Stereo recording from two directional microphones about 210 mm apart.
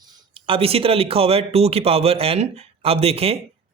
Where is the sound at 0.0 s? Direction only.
25° right (ahead or behind).